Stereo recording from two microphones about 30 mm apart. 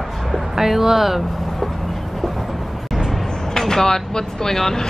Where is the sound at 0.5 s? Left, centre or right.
Centre.